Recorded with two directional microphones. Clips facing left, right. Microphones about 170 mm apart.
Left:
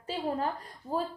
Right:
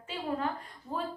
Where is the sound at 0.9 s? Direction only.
35° left (ahead or behind).